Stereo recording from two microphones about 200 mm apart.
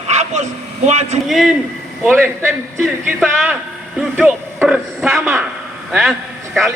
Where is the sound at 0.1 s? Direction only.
35° right (ahead or behind).